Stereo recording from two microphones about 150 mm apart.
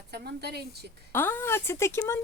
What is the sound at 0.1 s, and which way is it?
Speech, 90° right.